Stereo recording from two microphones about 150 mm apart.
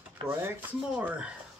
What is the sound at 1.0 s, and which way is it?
Speech, 10° right (ahead or behind).